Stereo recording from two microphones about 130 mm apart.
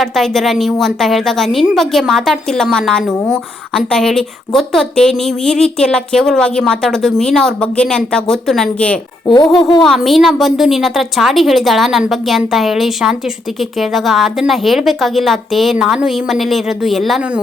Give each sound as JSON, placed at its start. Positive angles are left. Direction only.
{"t": 0.0, "sound": "a woman's voice", "side_deg": 0}
{"t": 9.2, "sound": "speech", "side_deg": 35}
{"t": 9.8, "sound": "a woman's voice", "side_deg": 0}